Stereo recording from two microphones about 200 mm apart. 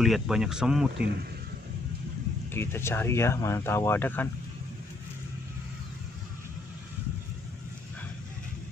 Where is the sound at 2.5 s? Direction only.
10° left (ahead or behind).